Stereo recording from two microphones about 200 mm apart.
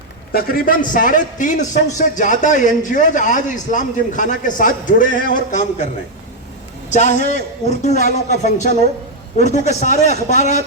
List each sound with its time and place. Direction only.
0.3 s a man's voice: 45° left (ahead or behind)
6.9 s a man's voice: 35° left (ahead or behind)